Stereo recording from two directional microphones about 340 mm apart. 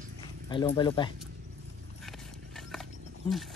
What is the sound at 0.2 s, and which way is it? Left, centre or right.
Speech, centre.